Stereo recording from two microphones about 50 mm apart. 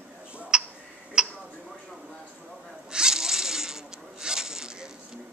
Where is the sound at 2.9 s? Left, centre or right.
Centre.